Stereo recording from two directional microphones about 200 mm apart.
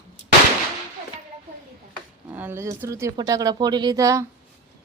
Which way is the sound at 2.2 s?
10° right (ahead or behind).